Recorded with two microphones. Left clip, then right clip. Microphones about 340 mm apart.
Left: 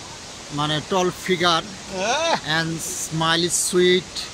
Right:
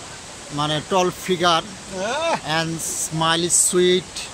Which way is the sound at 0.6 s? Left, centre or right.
Centre.